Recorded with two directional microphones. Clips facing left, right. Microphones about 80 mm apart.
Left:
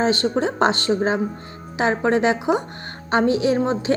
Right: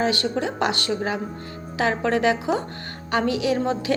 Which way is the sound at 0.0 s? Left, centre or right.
Left.